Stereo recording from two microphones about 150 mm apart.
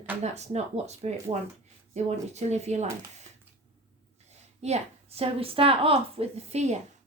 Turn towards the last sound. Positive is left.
turn(degrees=-50)  # may be behind; listen again after turning